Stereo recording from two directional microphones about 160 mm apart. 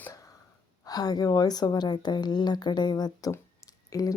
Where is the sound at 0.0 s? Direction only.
20° left (ahead or behind).